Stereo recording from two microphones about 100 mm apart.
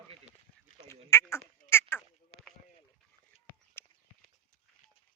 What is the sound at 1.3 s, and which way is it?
Duck, 25° left (ahead or behind).